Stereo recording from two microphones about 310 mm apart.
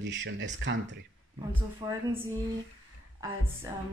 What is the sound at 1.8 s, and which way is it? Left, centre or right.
Music, centre.